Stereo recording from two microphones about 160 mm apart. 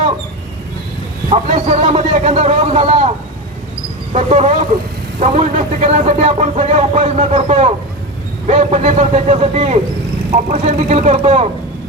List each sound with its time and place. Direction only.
1.5 s speech: 45° right (ahead or behind)
1.9 s a sound: 45° right (ahead or behind)
4.1 s speech: 45° right (ahead or behind)